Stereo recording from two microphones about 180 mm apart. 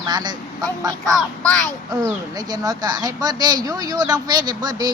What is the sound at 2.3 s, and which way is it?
Speech, 20° right (ahead or behind).